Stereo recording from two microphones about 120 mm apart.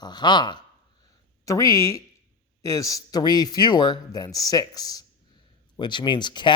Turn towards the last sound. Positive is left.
turn(degrees=40)  # may be behind; listen again after turning